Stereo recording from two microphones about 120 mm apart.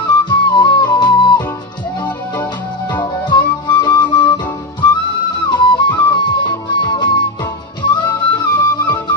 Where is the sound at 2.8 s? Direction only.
40° left (ahead or behind).